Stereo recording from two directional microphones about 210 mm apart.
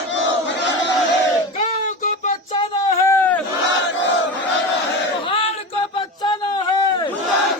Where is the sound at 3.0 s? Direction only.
10° left (ahead or behind).